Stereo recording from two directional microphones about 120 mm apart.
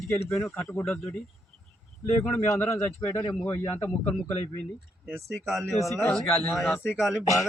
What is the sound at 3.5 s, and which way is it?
Speech, 20° left (ahead or behind).